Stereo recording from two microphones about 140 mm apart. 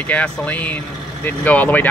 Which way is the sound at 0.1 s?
10° left (ahead or behind).